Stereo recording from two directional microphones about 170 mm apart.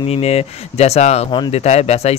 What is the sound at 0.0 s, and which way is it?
Speech, 35° left (ahead or behind).